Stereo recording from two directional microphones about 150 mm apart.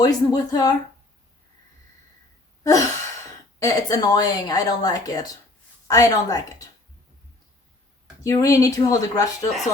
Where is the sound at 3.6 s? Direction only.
25° left (ahead or behind).